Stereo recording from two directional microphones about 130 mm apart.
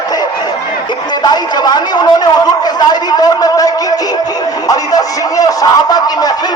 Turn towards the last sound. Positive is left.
turn(degrees=30)  # may be behind; listen again after turning